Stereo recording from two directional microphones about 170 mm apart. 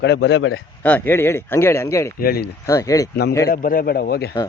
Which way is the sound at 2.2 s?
65° left (ahead or behind).